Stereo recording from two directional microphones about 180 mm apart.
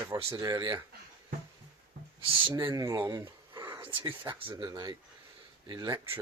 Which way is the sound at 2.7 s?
20° right (ahead or behind).